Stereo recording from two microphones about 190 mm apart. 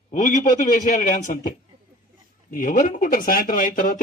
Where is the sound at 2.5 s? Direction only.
45° left (ahead or behind).